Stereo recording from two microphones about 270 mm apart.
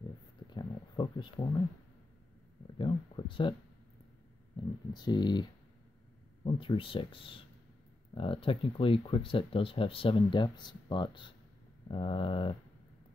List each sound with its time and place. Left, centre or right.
0.5 s a sound: centre
2.8 s speech: centre
4.6 s speech: centre